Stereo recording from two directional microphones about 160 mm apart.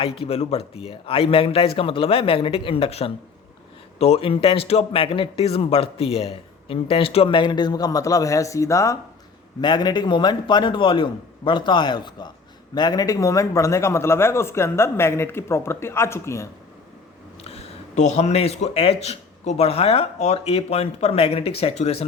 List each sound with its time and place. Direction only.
0.0 s a man's voice: 35° left (ahead or behind); by 16.5 s 15° left (ahead or behind)
17.4 s a man's voice: 40° left (ahead or behind)